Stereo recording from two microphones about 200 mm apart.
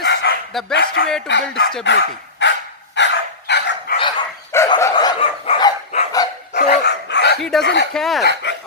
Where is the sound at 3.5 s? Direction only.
60° left (ahead or behind).